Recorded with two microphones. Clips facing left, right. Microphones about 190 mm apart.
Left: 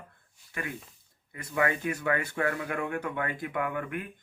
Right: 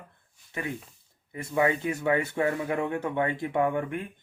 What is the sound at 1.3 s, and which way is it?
Speech, 25° right (ahead or behind).